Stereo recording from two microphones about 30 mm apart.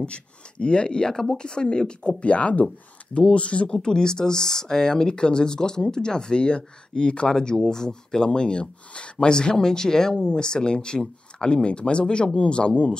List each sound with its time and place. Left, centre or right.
0.0 s speech: left; by 1.4 s centre
1.4 s speech: left
3.7 s speech: left